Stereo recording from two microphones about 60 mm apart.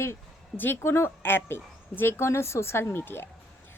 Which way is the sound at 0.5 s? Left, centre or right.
Left.